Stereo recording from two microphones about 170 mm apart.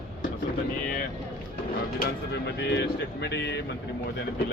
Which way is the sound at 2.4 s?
85° left.